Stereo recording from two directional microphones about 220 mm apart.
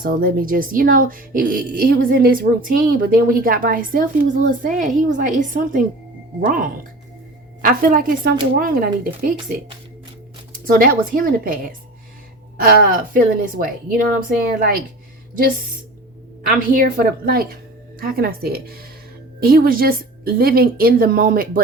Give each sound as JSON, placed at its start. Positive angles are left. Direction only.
{"t": 0.0, "sound": "a woman's voice", "side_deg": -40}
{"t": 10.7, "sound": "a woman's voice", "side_deg": -40}
{"t": 16.5, "sound": "a woman's voice", "side_deg": -40}